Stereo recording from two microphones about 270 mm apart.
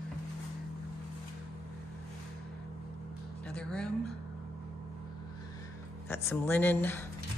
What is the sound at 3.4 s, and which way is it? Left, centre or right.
Music, centre.